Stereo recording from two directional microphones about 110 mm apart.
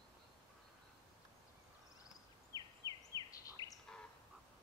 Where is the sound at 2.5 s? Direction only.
35° right (ahead or behind).